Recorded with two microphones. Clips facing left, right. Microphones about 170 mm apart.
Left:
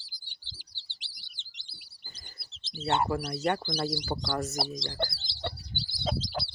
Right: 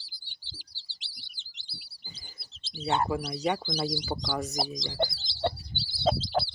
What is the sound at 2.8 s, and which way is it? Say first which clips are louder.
Speech: even; centre (ahead or behind).